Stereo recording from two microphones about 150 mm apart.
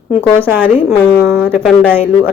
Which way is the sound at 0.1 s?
15° right (ahead or behind).